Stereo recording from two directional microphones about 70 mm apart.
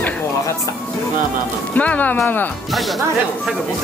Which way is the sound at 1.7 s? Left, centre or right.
Left.